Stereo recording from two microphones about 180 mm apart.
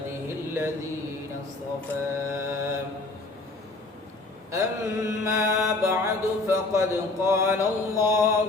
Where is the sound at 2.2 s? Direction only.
15° right (ahead or behind).